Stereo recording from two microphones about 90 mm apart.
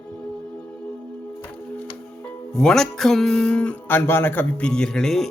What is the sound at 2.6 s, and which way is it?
Speech, 5° left (ahead or behind).